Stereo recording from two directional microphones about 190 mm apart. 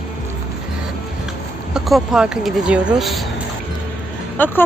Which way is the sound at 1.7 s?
5° right (ahead or behind).